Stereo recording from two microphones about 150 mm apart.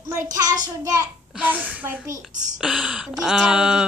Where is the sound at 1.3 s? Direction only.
10° right (ahead or behind).